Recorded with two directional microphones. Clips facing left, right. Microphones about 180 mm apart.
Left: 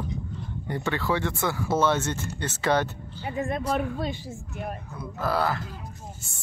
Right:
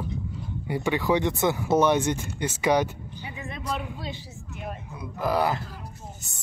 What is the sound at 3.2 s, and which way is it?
A woman's voice, 50° left (ahead or behind).